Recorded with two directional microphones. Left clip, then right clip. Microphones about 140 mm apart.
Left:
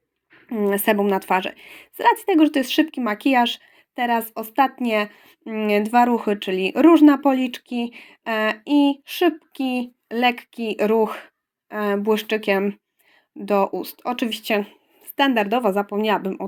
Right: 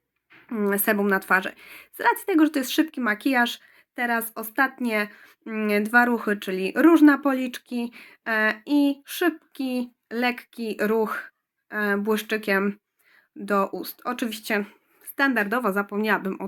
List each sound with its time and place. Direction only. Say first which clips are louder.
0.4 s a woman's voice: left 4 dB; 10° left (ahead or behind)